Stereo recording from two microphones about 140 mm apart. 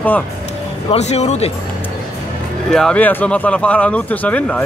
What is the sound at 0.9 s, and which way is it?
Speech, 55° left (ahead or behind).